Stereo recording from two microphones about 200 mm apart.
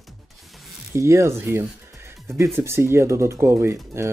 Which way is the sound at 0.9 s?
15° right (ahead or behind).